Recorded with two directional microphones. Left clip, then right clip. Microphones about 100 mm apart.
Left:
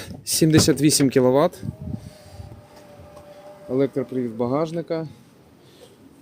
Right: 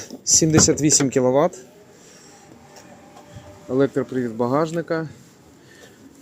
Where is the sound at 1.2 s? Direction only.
85° left.